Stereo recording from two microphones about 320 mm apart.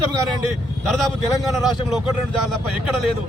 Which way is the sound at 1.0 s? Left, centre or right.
Centre.